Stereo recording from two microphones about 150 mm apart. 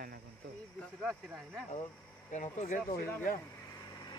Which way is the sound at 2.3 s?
50° left (ahead or behind).